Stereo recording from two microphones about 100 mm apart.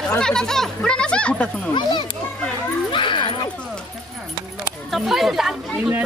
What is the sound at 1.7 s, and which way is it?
Speech, 50° left (ahead or behind).